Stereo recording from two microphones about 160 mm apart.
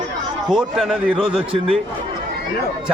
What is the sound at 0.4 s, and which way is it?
Speech, centre (ahead or behind).